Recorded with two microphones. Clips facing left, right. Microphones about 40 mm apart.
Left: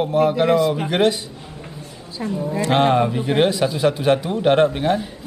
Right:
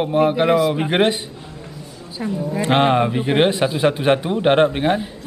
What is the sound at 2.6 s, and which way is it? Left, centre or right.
A man's voice, right.